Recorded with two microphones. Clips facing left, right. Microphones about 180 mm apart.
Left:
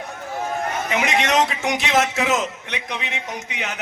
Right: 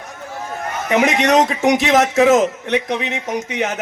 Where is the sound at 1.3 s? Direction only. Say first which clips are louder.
Right 6 dB; 40° right (ahead or behind).